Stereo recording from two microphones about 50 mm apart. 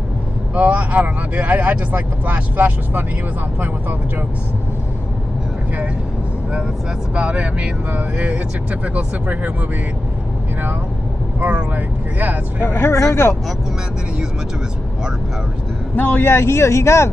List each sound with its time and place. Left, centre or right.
0.6 s speech: right
7.2 s speech: right
8.8 s speech: right
11.4 s speech: right
12.6 s speech: left
12.9 s speech: left
16.2 s speech: left